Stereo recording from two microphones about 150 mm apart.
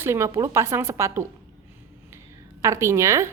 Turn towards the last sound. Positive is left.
turn(degrees=-20)  # may be behind; listen again after turning